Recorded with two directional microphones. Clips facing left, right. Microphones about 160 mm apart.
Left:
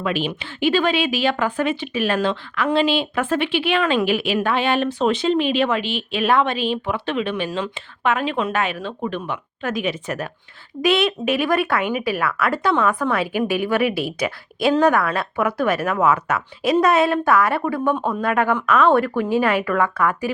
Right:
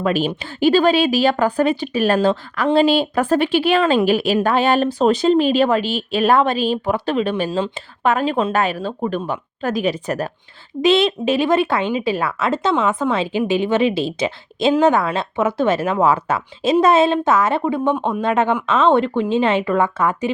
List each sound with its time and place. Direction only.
0.0 s a woman's voice: 40° right (ahead or behind); by 20.3 s 25° right (ahead or behind)